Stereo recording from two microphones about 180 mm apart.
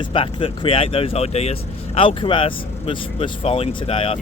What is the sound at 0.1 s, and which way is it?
Speech, 30° left (ahead or behind).